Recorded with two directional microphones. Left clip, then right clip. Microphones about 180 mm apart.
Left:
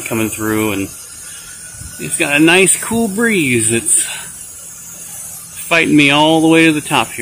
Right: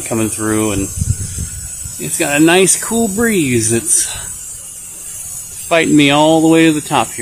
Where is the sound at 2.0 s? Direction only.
5° right (ahead or behind).